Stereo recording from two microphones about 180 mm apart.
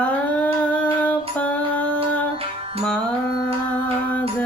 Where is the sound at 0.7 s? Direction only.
10° left (ahead or behind).